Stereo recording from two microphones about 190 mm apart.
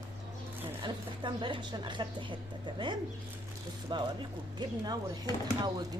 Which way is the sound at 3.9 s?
25° right (ahead or behind).